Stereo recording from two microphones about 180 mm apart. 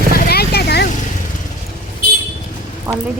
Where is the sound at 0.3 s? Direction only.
60° left (ahead or behind).